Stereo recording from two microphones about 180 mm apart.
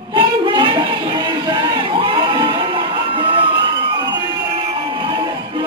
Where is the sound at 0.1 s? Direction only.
25° right (ahead or behind).